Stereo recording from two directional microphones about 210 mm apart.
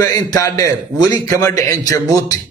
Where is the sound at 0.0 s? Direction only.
15° left (ahead or behind).